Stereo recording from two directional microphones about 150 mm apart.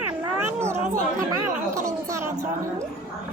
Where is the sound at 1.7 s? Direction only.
20° right (ahead or behind).